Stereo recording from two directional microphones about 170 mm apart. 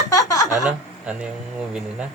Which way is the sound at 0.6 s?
5° right (ahead or behind).